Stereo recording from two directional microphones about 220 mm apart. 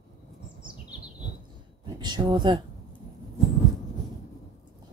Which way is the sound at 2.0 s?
20° right (ahead or behind).